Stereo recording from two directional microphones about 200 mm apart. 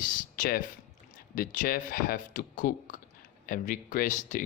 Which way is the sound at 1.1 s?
45° left (ahead or behind).